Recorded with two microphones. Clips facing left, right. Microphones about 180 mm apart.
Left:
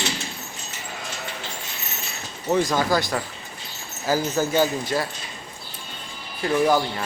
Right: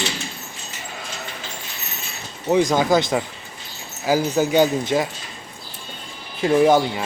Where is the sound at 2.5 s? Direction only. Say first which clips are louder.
Right 4 dB; 15° right (ahead or behind).